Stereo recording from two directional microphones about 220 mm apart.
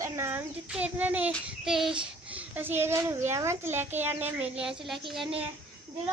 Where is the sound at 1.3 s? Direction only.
Centre (ahead or behind).